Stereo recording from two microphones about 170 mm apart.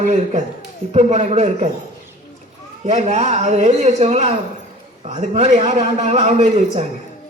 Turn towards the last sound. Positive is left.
turn(degrees=-40)  # may be behind; listen again after turning